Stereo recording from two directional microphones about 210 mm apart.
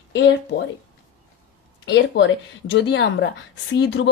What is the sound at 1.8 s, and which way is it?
Speech, 55° left (ahead or behind).